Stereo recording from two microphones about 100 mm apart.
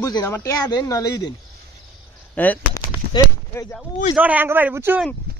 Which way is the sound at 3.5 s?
25° left (ahead or behind).